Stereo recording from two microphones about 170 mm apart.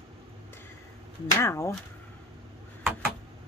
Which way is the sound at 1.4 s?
15° left (ahead or behind).